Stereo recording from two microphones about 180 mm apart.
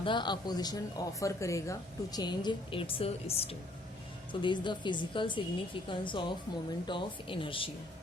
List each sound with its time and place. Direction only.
0.0 s speech: 25° left (ahead or behind)